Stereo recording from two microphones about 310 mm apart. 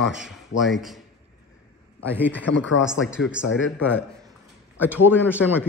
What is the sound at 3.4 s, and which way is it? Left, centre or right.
Speech, left.